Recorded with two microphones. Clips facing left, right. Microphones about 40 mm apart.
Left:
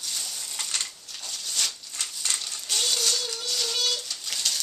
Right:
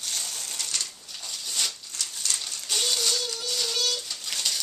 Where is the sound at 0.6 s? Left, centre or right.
Left.